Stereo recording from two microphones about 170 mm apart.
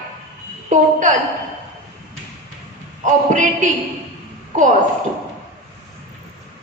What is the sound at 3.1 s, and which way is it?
Speech, 45° right (ahead or behind).